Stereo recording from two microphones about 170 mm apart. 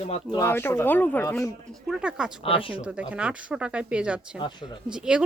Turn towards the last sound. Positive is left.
turn(degrees=-5)  # may be behind; listen again after turning